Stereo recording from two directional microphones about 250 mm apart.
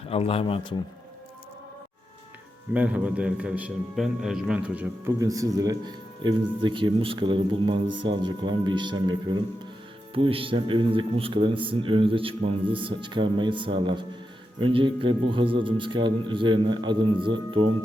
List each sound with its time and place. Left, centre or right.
0.1 s speech: left
2.7 s a man's voice: centre